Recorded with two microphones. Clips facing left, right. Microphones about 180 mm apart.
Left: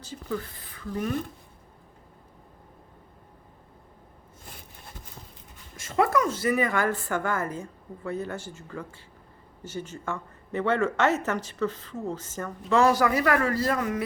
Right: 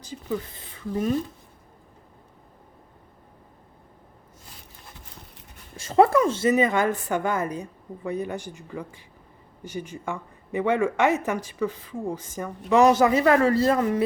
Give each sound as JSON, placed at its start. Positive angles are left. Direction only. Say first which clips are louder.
{"t": 0.0, "sound": "speech", "louder": "right 2 dB", "side_deg": -15}
{"t": 5.7, "sound": "speech", "louder": "right 6 dB", "side_deg": -30}